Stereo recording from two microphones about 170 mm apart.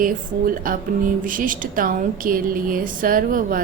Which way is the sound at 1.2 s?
50° right (ahead or behind).